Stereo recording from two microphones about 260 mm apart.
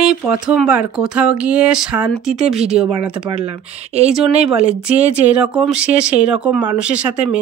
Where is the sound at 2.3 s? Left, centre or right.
Right.